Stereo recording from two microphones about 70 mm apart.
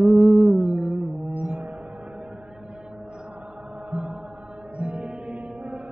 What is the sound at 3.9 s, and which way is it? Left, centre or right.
Mantra, centre.